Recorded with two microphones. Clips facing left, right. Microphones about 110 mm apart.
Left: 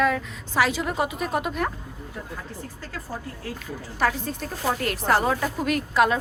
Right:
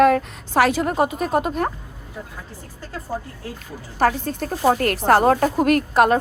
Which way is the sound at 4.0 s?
45° right (ahead or behind).